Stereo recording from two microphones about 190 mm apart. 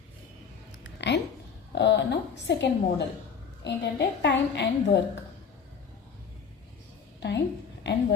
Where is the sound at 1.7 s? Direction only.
65° left (ahead or behind).